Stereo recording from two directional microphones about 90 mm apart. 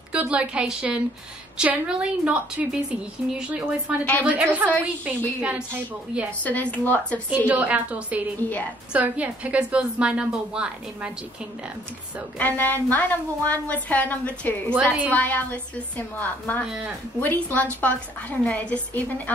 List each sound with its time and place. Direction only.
0.1 s a woman's voice: 15° right (ahead or behind)
6.4 s a woman's voice: 15° left (ahead or behind)
7.2 s a woman's voice: 15° right (ahead or behind)
12.4 s a woman's voice: 20° left (ahead or behind)
14.7 s a woman's voice: 15° right (ahead or behind)
15.0 s a woman's voice: 20° left (ahead or behind)